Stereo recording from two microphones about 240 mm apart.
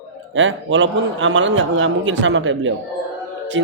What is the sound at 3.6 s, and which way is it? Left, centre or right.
A capella, right.